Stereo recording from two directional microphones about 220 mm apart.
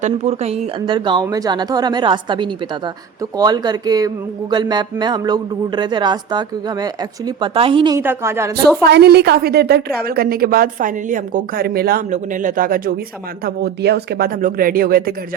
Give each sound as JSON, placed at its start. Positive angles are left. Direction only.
{"t": 0.0, "sound": "speech", "side_deg": -30}
{"t": 7.9, "sound": "speech", "side_deg": -10}
{"t": 8.9, "sound": "a woman's voice", "side_deg": -50}